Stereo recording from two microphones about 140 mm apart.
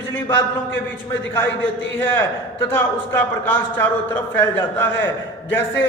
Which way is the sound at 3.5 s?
15° left (ahead or behind).